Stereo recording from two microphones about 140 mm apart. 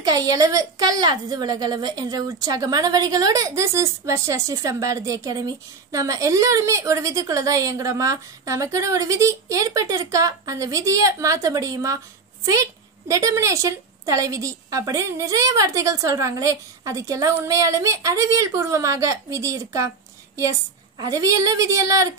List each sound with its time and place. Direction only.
0.0 s a woman's voice: 25° right (ahead or behind)
13.1 s a woman's voice: 20° right (ahead or behind)
21.0 s a woman's voice: 25° right (ahead or behind)